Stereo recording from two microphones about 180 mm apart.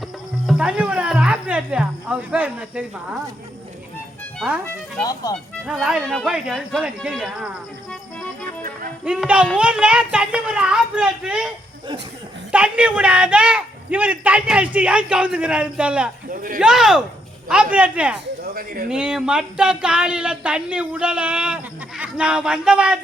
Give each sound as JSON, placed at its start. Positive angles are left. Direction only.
{"t": 0.4, "sound": "speech", "side_deg": -5}
{"t": 4.4, "sound": "speech", "side_deg": 0}
{"t": 4.6, "sound": "speech", "side_deg": 20}
{"t": 5.6, "sound": "speech", "side_deg": 0}
{"t": 9.0, "sound": "a man's voice", "side_deg": -5}
{"t": 16.3, "sound": "speech", "side_deg": -50}
{"t": 16.6, "sound": "a man's voice", "side_deg": -5}
{"t": 18.4, "sound": "speech", "side_deg": -55}
{"t": 18.9, "sound": "speech", "side_deg": -5}